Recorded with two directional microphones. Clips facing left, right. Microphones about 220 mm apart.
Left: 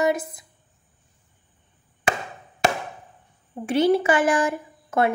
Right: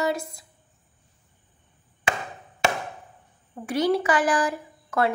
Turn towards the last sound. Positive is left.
turn(degrees=25)  # may be behind; listen again after turning